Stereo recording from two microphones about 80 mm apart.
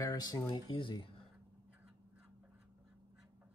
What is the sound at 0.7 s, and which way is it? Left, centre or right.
Speech, left.